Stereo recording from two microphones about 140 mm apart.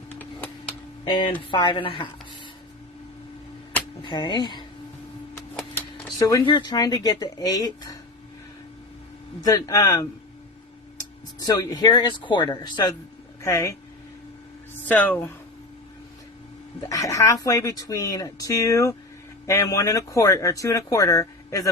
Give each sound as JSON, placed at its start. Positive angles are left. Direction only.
{"t": 1.5, "sound": "speech", "side_deg": 35}
{"t": 4.0, "sound": "speech", "side_deg": 35}
{"t": 5.7, "sound": "speech", "side_deg": 25}
{"t": 9.5, "sound": "speech", "side_deg": 25}
{"t": 11.3, "sound": "speech", "side_deg": 25}
{"t": 13.4, "sound": "speech", "side_deg": 20}
{"t": 14.8, "sound": "speech", "side_deg": 10}
{"t": 16.9, "sound": "speech", "side_deg": 25}